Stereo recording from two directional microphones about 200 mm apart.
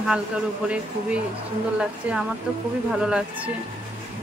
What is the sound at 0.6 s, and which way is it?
Speech, 5° right (ahead or behind).